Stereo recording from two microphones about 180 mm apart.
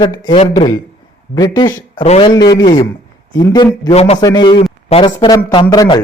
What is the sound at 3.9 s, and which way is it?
Speech, 35° left (ahead or behind).